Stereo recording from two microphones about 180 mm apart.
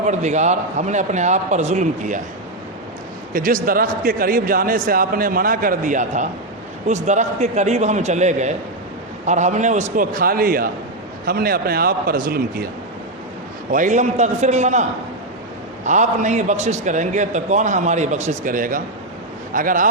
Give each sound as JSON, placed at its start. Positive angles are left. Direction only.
{"t": 0.0, "sound": "a man's voice", "side_deg": -40}
{"t": 3.3, "sound": "a man's voice", "side_deg": -50}
{"t": 13.7, "sound": "a man's voice", "side_deg": -45}